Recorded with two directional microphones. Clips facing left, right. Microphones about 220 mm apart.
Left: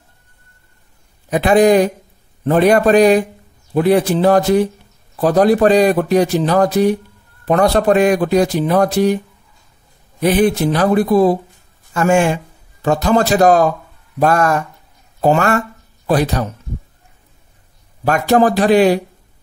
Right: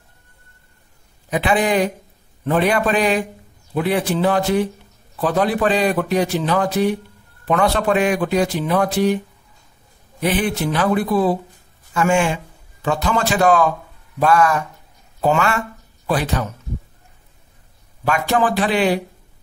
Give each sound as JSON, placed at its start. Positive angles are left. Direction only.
{"t": 1.3, "sound": "speech", "side_deg": 40}
{"t": 10.2, "sound": "speech", "side_deg": 40}
{"t": 18.0, "sound": "speech", "side_deg": 40}